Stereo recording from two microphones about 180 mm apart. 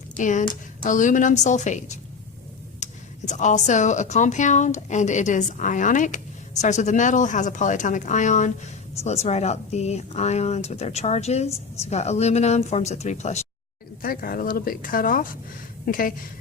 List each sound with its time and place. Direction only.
0.2 s a woman's voice: 45° left (ahead or behind)
14.0 s a woman's voice: 55° left (ahead or behind)